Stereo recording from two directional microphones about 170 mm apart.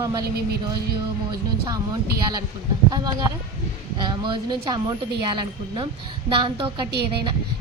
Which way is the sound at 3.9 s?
30° right (ahead or behind).